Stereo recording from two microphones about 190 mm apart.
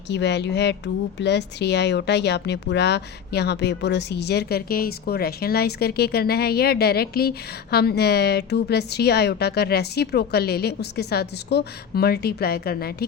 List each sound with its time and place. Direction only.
0.1 s speech: 65° left (ahead or behind)